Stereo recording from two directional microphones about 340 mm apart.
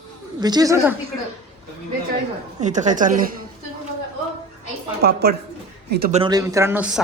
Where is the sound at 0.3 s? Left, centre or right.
Centre.